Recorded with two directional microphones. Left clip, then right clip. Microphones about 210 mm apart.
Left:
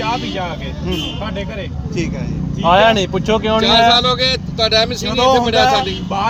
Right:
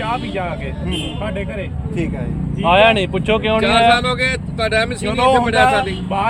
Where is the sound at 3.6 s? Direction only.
Centre (ahead or behind).